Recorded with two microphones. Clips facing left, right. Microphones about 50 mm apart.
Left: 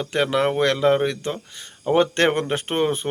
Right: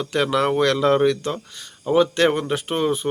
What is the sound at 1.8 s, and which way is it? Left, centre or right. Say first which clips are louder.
Speech: right 1 dB; left.